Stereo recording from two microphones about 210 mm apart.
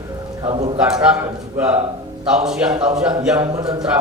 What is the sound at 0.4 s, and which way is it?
Speech, 25° right (ahead or behind).